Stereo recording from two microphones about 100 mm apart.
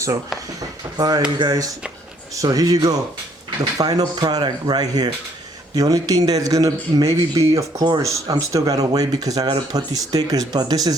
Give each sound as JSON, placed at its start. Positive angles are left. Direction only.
{"t": 0.9, "sound": "speech", "side_deg": -40}
{"t": 7.8, "sound": "speech", "side_deg": -45}
{"t": 8.3, "sound": "speech", "side_deg": -35}